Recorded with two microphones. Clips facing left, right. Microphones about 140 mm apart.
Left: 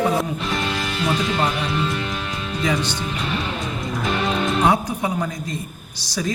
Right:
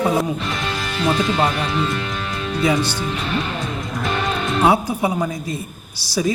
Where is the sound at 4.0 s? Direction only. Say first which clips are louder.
Left 1 dB; centre (ahead or behind).